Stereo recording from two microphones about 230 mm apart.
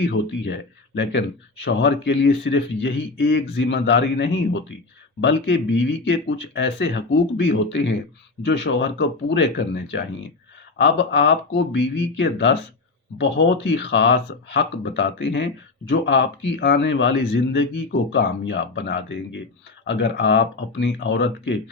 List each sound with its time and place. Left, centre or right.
0.0 s speech: left